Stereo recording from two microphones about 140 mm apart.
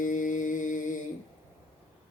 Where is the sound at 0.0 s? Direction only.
70° left (ahead or behind).